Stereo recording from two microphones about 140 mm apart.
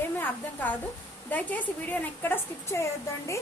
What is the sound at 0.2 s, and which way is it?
A woman's voice, 10° left (ahead or behind).